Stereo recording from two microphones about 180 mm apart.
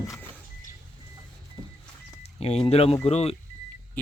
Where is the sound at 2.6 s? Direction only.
35° left (ahead or behind).